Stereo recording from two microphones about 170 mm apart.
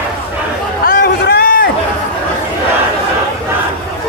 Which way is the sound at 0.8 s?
60° left (ahead or behind).